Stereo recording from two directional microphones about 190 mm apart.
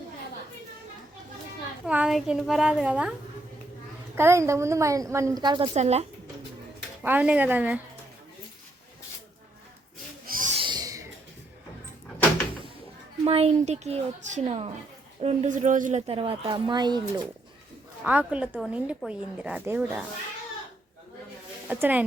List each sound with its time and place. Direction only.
1.8 s a child's voice: 5° right (ahead or behind); by 5.7 s 25° right (ahead or behind)
5.7 s a woman's voice: 35° right (ahead or behind)
7.0 s a woman's voice: 10° right (ahead or behind)
10.2 s owl: 45° right (ahead or behind)
10.6 s owl: 20° right (ahead or behind)
13.2 s a woman's voice: 30° right (ahead or behind)
18.0 s a woman's voice: 10° right (ahead or behind)
21.7 s a woman's voice: 10° right (ahead or behind)